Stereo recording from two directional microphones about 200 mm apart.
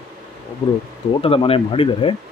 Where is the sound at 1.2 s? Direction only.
30° left (ahead or behind).